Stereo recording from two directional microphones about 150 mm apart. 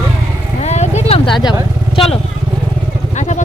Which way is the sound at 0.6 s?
50° left (ahead or behind).